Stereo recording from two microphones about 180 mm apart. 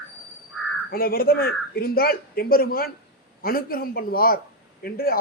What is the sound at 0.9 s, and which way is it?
A man's voice, 55° left (ahead or behind).